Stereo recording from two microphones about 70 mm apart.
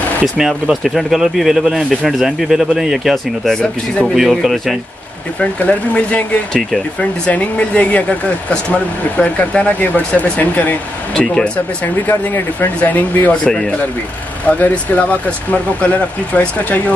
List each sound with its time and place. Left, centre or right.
0.4 s speech: centre
5.4 s speech: left
6.5 s speech: centre
11.1 s speech: centre
13.5 s speech: centre
14.5 s speech: left